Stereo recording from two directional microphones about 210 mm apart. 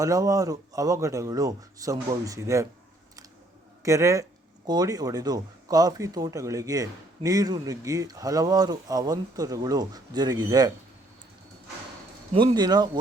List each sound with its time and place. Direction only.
0.0 s speech: 15° right (ahead or behind)
3.8 s speech: 15° right (ahead or behind)
12.3 s speech: 25° right (ahead or behind)